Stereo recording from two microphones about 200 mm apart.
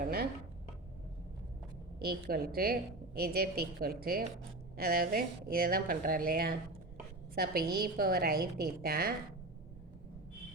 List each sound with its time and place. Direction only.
2.0 s speech: 50° right (ahead or behind)